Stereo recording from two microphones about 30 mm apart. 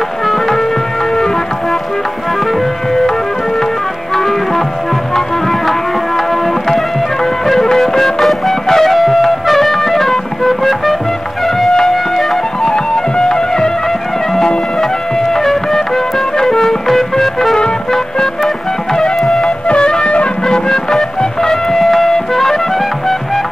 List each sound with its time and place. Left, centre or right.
0.3 s music: centre
4.1 s music: centre
12.6 s music: left
14.8 s music: centre
19.2 s music: centre